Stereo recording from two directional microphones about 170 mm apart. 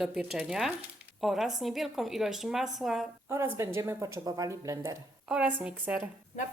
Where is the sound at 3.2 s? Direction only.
15° right (ahead or behind).